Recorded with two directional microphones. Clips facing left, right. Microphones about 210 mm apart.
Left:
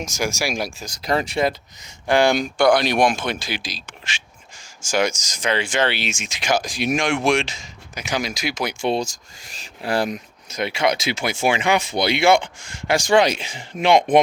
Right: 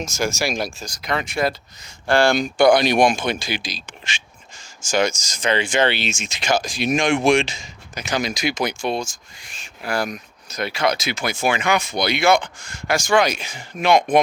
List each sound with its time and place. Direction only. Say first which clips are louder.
0.0 s speech: right 1 dB; 15° left (ahead or behind)
1.0 s speech: left 3 dB; 35° left (ahead or behind)
1.4 s speech: left 1 dB; 20° left (ahead or behind)
2.6 s speech: right 3 dB; centre (ahead or behind)
8.8 s speech: left 2 dB; 30° left (ahead or behind)